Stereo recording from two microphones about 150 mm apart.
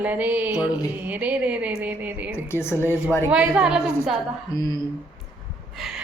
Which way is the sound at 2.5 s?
15° left (ahead or behind).